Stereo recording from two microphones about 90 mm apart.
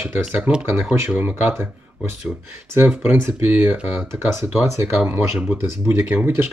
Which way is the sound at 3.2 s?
25° right (ahead or behind).